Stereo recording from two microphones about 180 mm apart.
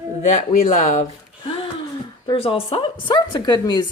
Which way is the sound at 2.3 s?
30° left (ahead or behind).